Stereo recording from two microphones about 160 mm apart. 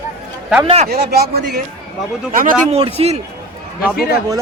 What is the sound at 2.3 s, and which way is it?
Speech, 60° right (ahead or behind).